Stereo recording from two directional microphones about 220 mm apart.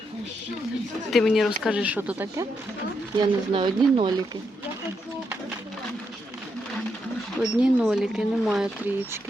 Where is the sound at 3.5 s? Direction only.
20° right (ahead or behind).